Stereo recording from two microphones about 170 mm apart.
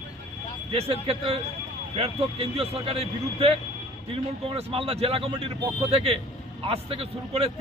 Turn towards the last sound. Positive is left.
turn(degrees=-35)  # may be behind; listen again after turning